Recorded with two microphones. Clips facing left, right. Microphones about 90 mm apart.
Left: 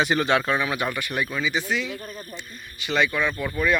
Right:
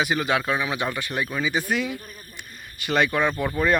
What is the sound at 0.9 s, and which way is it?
Speech, 30° right (ahead or behind).